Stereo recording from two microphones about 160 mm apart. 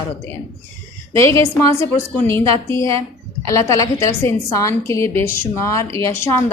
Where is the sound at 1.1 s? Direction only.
20° left (ahead or behind).